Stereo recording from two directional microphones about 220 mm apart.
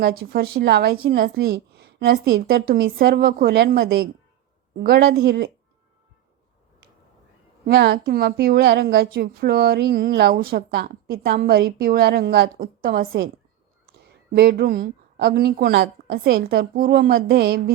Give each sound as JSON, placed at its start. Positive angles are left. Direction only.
{"t": 0.0, "sound": "a woman's voice", "side_deg": -45}
{"t": 7.6, "sound": "a woman's voice", "side_deg": -45}
{"t": 14.3, "sound": "a woman's voice", "side_deg": -45}